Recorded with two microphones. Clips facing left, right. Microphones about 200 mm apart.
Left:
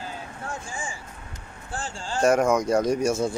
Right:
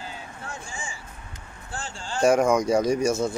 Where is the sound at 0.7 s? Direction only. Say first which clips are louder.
Left 3 dB; 50° left (ahead or behind).